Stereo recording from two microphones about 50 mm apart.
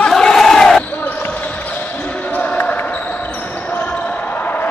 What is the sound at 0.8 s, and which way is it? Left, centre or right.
Basketball bounce, left.